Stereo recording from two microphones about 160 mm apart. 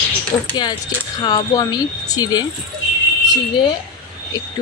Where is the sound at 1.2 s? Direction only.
25° left (ahead or behind).